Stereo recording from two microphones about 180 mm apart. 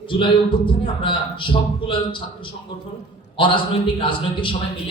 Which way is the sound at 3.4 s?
30° left (ahead or behind).